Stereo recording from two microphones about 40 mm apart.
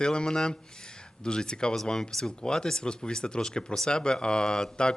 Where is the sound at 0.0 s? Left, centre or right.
Left.